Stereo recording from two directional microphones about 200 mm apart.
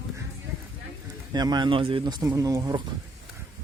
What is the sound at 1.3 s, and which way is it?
Speech, 20° right (ahead or behind).